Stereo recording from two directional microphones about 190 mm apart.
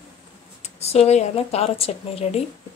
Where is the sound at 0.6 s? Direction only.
35° left (ahead or behind).